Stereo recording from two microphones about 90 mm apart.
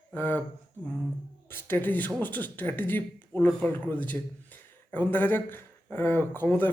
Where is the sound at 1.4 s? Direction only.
25° left (ahead or behind).